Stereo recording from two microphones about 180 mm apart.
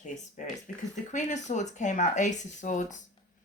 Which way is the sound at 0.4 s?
45° left (ahead or behind).